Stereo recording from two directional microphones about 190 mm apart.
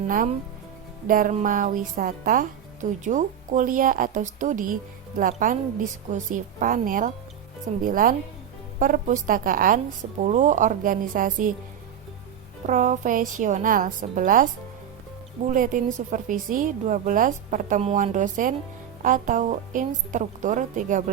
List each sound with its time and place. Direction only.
1.0 s a woman's voice: 45° right (ahead or behind)
12.6 s a woman's voice: 40° right (ahead or behind)
15.4 s a woman's voice: 45° right (ahead or behind)